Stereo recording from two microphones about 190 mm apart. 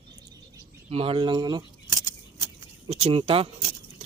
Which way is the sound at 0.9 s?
30° right (ahead or behind).